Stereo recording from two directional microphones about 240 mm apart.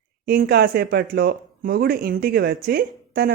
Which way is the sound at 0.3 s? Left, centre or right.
Right.